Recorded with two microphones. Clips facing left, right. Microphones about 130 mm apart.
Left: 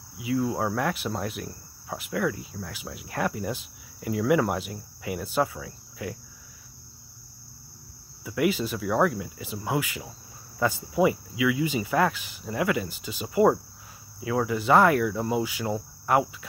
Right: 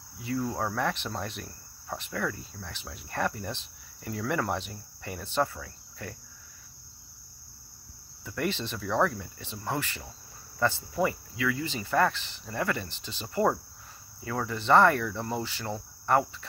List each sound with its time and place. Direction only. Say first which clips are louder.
0.2 s cricket: left 4 dB; 5° left (ahead or behind)
8.2 s cricket: left 7 dB; 5° left (ahead or behind)